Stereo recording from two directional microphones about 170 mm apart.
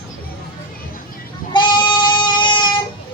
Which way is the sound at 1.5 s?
25° left (ahead or behind).